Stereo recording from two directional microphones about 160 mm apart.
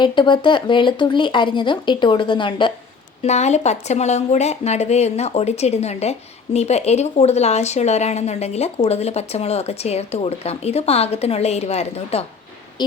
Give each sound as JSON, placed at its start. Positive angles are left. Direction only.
{"t": 0.0, "sound": "speech", "side_deg": 30}
{"t": 3.2, "sound": "speech", "side_deg": 45}